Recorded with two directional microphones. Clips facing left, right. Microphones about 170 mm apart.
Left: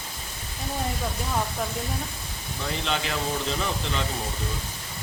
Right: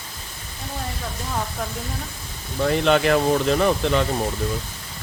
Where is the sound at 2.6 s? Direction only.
60° right (ahead or behind).